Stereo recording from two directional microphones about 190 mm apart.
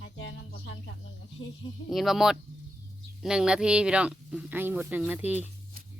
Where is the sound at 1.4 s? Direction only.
90° left.